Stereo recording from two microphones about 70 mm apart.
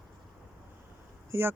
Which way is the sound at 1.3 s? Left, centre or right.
Right.